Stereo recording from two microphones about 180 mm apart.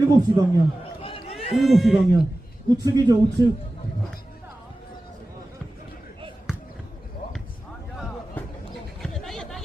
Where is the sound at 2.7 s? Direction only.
20° right (ahead or behind).